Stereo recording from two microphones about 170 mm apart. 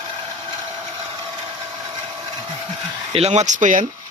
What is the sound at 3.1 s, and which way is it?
Speech, 40° right (ahead or behind).